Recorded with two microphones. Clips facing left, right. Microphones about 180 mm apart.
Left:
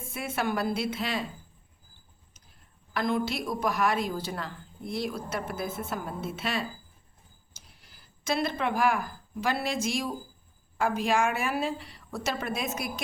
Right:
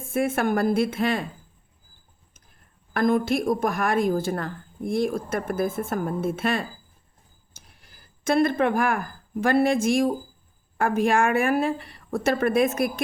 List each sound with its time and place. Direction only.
0.0 s a woman's voice: 50° right (ahead or behind)
2.9 s a woman's voice: 50° right (ahead or behind)